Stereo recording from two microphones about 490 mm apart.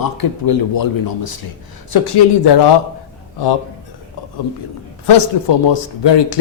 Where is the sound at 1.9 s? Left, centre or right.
Left.